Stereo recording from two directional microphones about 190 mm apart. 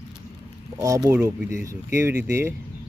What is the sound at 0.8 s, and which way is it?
Speech, 15° right (ahead or behind).